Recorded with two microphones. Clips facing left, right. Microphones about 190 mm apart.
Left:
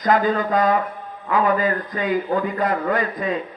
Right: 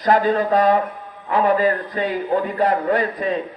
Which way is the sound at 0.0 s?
30° right (ahead or behind).